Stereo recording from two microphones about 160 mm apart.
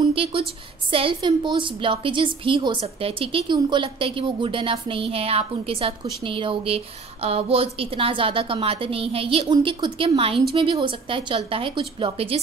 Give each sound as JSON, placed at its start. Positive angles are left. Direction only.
{"t": 0.1, "sound": "a woman's voice", "side_deg": -35}